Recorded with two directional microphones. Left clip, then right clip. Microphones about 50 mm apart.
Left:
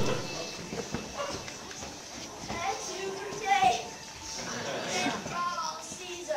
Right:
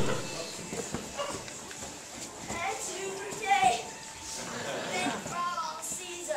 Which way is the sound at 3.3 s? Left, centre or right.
Centre.